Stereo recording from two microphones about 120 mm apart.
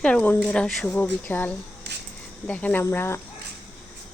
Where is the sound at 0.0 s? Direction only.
10° left (ahead or behind).